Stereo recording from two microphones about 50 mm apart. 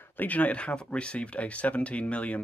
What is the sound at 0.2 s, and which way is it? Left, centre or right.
Speech, left.